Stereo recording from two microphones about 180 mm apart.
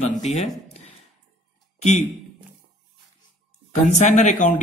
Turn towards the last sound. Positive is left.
turn(degrees=45)  # may be behind; listen again after turning